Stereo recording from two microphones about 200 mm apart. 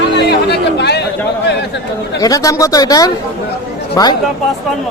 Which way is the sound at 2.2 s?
15° left (ahead or behind).